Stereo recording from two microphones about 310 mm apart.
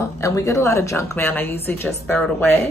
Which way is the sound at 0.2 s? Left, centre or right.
Centre.